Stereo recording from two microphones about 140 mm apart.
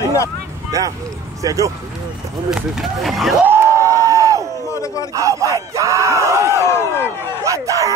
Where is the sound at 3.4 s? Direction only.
15° right (ahead or behind).